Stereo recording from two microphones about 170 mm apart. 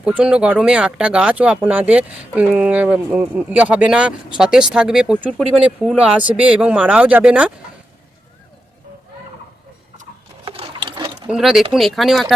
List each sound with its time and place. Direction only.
0.0 s speech: 5° right (ahead or behind)
10.4 s sewing machine: 30° right (ahead or behind)
11.3 s speech: centre (ahead or behind)